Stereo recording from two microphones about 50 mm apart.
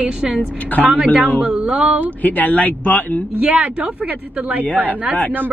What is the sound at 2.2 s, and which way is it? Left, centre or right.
Speech, left.